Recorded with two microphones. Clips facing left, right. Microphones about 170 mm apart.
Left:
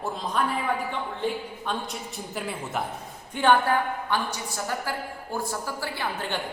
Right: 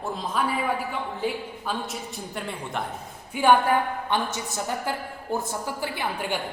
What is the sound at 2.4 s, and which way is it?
Speech, 5° left (ahead or behind).